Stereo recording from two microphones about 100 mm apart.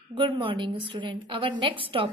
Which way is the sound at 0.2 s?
55° right (ahead or behind).